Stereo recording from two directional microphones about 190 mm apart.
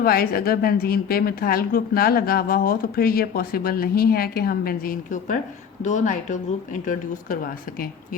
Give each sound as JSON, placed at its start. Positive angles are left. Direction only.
{"t": 0.0, "sound": "a woman's voice", "side_deg": 50}